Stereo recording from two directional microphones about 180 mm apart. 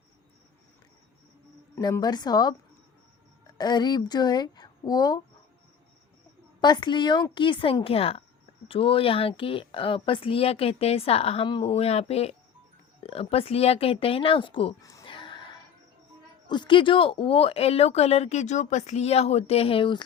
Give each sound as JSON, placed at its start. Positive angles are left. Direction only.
{"t": 1.7, "sound": "a woman's voice", "side_deg": 20}
{"t": 6.6, "sound": "a woman's voice", "side_deg": 25}
{"t": 14.8, "sound": "a sound", "side_deg": 20}
{"t": 16.5, "sound": "speech", "side_deg": 25}